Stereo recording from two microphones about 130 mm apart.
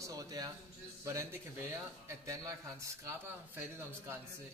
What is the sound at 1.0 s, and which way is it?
A man's voice, 20° right (ahead or behind).